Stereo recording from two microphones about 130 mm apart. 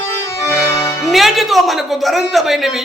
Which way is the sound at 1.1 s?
Centre (ahead or behind).